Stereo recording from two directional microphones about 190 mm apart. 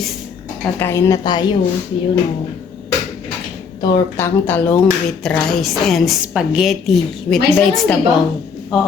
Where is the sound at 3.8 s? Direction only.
15° left (ahead or behind).